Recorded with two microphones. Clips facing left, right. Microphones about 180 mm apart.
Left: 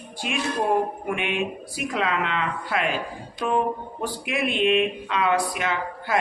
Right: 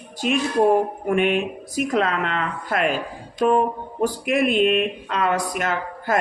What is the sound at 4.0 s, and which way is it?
Speech, 45° right (ahead or behind).